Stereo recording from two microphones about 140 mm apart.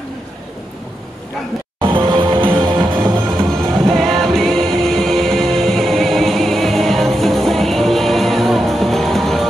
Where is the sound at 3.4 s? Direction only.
20° right (ahead or behind).